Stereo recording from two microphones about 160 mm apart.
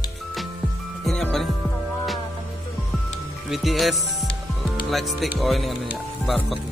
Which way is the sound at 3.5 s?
Centre (ahead or behind).